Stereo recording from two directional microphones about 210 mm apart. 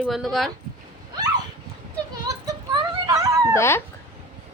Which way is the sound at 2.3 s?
15° right (ahead or behind).